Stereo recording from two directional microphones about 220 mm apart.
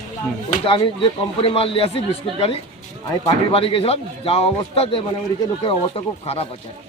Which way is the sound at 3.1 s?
25° left (ahead or behind).